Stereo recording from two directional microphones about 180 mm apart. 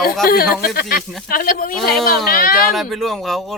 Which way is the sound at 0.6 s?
55° left (ahead or behind).